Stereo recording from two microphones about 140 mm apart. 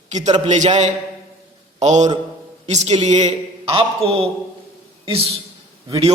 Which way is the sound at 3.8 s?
40° right (ahead or behind).